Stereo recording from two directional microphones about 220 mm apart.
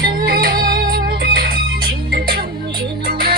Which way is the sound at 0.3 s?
40° right (ahead or behind).